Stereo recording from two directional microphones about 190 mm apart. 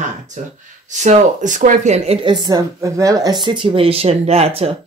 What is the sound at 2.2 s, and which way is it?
Speech, 25° right (ahead or behind).